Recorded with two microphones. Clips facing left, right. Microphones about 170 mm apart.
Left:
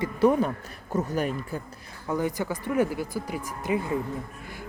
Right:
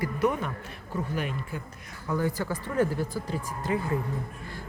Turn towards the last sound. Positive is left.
turn(degrees=15)  # may be behind; listen again after turning